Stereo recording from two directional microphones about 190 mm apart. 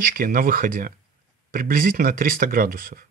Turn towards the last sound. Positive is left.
turn(degrees=-50)  # may be behind; listen again after turning